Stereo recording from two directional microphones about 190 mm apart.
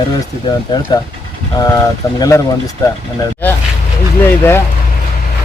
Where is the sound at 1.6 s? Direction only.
20° left (ahead or behind).